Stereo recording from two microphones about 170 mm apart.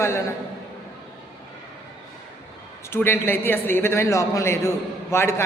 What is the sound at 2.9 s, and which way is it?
A man's voice, 10° left (ahead or behind).